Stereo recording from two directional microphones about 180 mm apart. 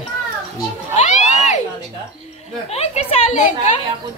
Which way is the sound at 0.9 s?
40° left (ahead or behind).